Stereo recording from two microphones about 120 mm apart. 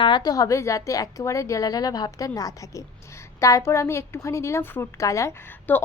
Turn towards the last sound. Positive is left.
turn(degrees=15)  # may be behind; listen again after turning